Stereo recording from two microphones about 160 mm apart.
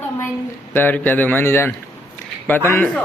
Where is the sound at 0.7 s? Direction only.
10° left (ahead or behind).